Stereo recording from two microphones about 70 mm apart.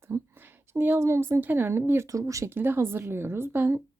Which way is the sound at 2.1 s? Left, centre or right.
Right.